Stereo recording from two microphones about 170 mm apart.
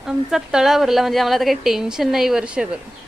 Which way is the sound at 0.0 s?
Centre (ahead or behind).